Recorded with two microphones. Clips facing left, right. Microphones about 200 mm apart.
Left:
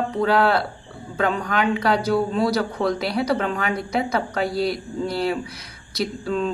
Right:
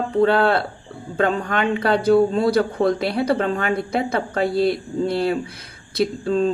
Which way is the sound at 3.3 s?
30° right (ahead or behind).